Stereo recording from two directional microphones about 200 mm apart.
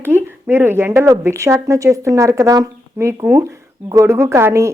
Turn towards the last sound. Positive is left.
turn(degrees=-15)  # may be behind; listen again after turning